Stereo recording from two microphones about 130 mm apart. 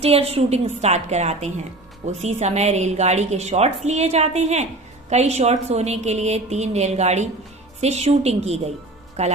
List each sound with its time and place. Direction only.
0.0 s a woman's voice: 50° right (ahead or behind)